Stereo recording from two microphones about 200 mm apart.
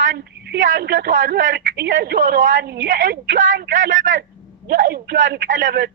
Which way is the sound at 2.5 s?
60° right (ahead or behind).